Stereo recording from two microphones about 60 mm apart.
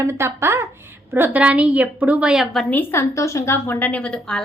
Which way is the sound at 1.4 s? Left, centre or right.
Centre.